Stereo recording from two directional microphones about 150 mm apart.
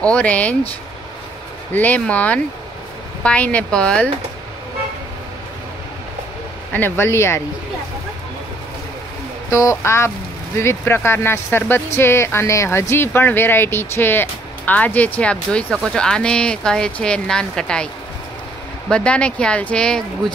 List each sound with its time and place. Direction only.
0.0 s speech: 10° left (ahead or behind)
1.7 s speech: 10° left (ahead or behind)
6.7 s speech: 15° left (ahead or behind)
9.5 s speech: 20° left (ahead or behind); by 17.8 s 5° left (ahead or behind)
18.9 s speech: 5° left (ahead or behind)